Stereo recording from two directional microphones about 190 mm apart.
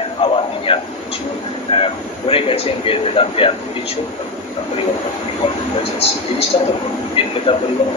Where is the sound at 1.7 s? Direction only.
30° left (ahead or behind).